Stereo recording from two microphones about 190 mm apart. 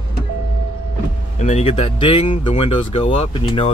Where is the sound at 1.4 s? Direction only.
35° left (ahead or behind).